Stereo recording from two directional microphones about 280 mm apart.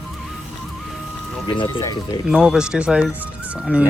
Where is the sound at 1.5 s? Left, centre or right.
Centre.